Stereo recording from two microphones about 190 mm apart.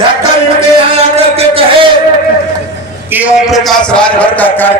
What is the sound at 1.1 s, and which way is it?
Speech, 30° right (ahead or behind).